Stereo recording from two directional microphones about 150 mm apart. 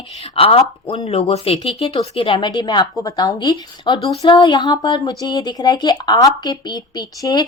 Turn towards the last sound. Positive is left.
turn(degrees=25)  # may be behind; listen again after turning